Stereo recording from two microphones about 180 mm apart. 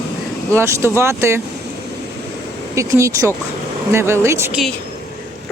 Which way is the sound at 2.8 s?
15° right (ahead or behind).